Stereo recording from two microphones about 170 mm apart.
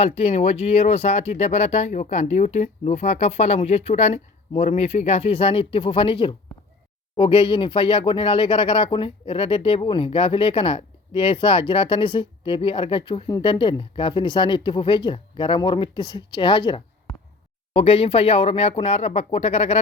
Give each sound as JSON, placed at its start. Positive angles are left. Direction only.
{"t": 0.0, "sound": "speech", "side_deg": 35}